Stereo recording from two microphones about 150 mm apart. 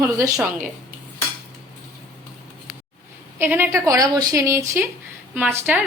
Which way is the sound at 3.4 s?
15° right (ahead or behind).